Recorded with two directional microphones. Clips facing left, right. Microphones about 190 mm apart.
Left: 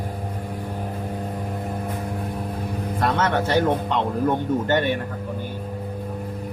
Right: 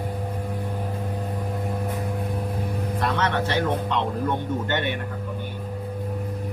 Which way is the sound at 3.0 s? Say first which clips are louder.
Left 3 dB; 45° left (ahead or behind).